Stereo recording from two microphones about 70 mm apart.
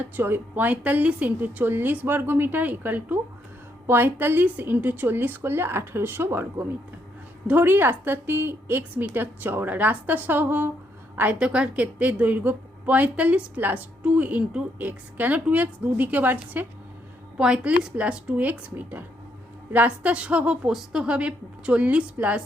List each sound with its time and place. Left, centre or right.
0.0 s a woman's voice: right
11.2 s a woman's voice: centre
17.3 s a woman's voice: centre